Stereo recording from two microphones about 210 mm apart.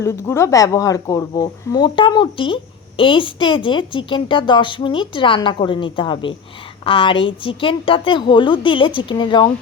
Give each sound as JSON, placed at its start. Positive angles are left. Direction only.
{"t": 0.0, "sound": "a woman's voice", "side_deg": 15}